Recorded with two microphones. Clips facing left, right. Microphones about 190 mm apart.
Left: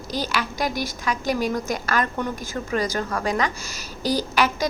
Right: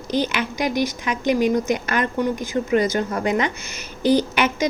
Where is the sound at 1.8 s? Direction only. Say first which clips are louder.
Right 3 dB; 20° right (ahead or behind).